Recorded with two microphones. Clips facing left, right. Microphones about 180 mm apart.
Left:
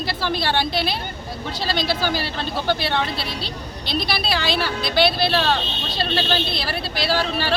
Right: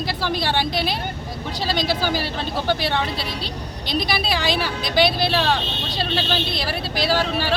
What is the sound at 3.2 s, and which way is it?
Speech, 40° right (ahead or behind).